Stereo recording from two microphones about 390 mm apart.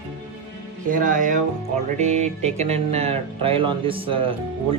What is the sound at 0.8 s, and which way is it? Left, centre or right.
Speech, centre.